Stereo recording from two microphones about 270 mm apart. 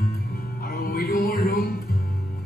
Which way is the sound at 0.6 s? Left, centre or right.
Left.